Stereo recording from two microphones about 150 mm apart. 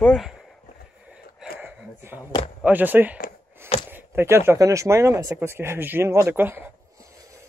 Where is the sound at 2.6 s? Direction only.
10° right (ahead or behind).